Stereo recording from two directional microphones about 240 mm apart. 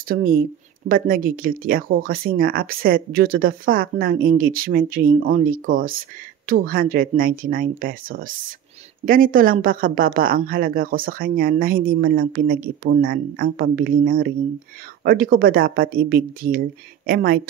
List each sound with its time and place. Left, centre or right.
0.1 s speech: right